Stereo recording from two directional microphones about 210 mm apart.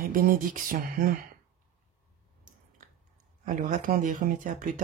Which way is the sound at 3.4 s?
40° right (ahead or behind).